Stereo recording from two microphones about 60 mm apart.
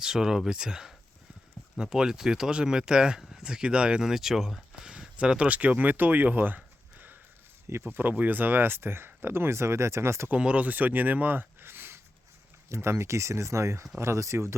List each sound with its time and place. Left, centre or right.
0.0 s speech: centre; by 6.6 s right
7.7 s speech: right
10.3 s speech: right